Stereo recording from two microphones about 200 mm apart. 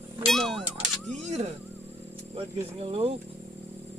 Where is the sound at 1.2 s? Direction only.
35° right (ahead or behind).